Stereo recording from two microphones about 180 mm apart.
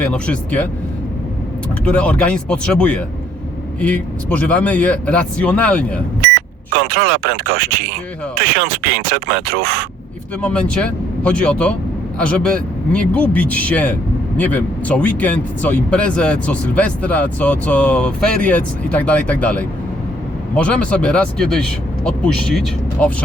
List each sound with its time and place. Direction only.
0.0 s speech: 5° left (ahead or behind)
1.8 s speech: 5° left (ahead or behind)
6.7 s speech: 60° right (ahead or behind)
8.4 s speech: 60° right (ahead or behind)
10.4 s speech: 5° left (ahead or behind)